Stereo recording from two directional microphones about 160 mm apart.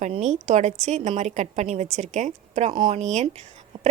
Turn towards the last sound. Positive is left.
turn(degrees=-45)  # may be behind; listen again after turning